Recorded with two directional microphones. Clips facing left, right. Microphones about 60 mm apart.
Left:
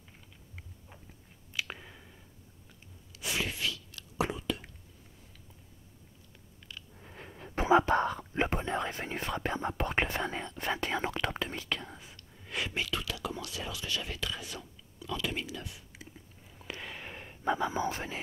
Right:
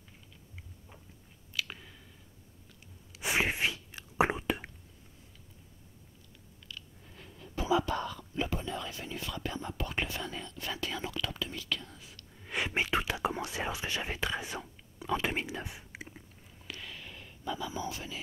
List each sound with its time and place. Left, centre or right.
1.5 s clicking: centre
3.1 s chewing: right
7.0 s whispering: left
12.4 s whispering: right
16.5 s whispering: left